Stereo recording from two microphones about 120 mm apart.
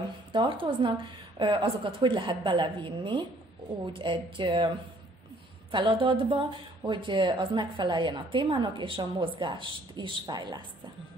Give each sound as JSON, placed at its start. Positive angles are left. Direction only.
{"t": 0.3, "sound": "speech", "side_deg": -45}